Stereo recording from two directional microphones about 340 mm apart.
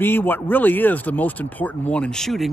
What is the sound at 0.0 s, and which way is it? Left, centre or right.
Speech, centre.